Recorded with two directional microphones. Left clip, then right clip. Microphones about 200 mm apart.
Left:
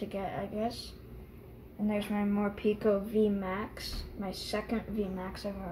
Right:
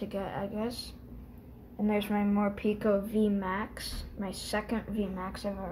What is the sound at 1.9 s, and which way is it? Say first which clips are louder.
Speech: right 3 dB; 30° right (ahead or behind).